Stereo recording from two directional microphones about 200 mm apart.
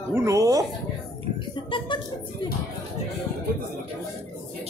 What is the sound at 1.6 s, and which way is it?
Speech, 25° left (ahead or behind).